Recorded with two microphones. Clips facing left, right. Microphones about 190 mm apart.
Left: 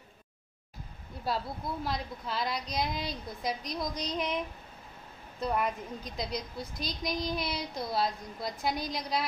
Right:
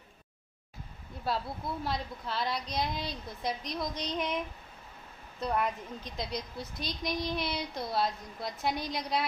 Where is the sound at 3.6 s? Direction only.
40° left (ahead or behind).